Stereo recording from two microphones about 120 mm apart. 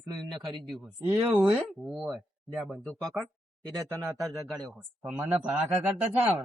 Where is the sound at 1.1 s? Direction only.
20° right (ahead or behind).